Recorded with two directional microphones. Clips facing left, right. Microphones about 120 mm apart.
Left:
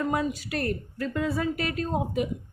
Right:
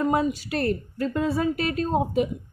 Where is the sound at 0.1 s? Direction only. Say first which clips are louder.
Right 4 dB; 25° right (ahead or behind).